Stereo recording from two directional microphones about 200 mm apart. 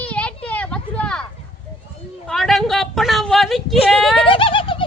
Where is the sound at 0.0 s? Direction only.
5° left (ahead or behind).